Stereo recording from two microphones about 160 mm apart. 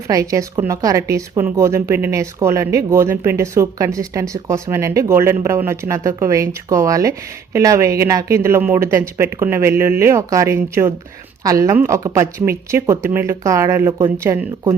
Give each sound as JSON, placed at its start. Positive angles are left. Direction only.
{"t": 0.1, "sound": "speech", "side_deg": -20}